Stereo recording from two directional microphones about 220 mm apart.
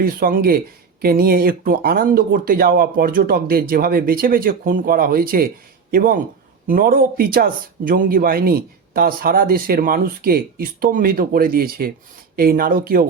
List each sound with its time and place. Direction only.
0.0 s speech: 40° right (ahead or behind)